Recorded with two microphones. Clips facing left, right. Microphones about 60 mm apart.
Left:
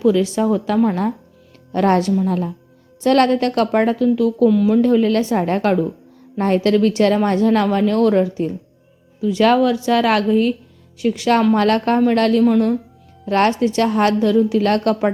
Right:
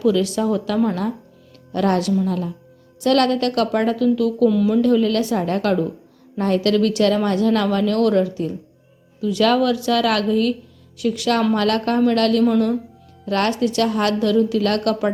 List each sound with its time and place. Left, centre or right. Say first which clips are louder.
0.0 s a woman's voice: left 2 dB; left
1.7 s a woman's voice: left 3 dB; left
4.4 s speech: left 2 dB; centre
4.8 s a woman's voice: left 2 dB; left
12.4 s speech: left 2 dB; centre
13.2 s a woman's voice: left 4 dB; left